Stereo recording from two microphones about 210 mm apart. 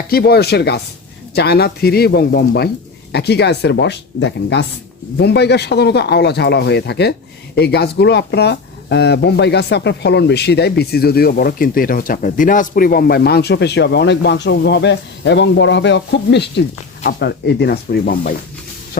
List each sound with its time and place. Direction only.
0.1 s speech: 50° left (ahead or behind)